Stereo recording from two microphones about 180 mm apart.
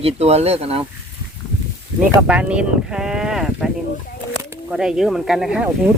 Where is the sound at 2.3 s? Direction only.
5° right (ahead or behind).